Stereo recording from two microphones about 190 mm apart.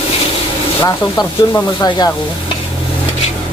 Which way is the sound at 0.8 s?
10° left (ahead or behind).